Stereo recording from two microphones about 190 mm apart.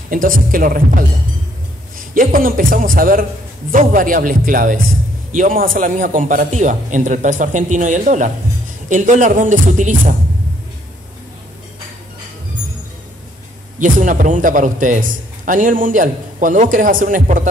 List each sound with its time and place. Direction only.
0.1 s a man's voice: 45° right (ahead or behind)
13.7 s a man's voice: 45° right (ahead or behind)